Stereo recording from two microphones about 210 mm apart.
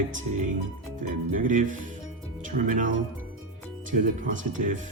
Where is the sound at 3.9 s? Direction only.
40° right (ahead or behind).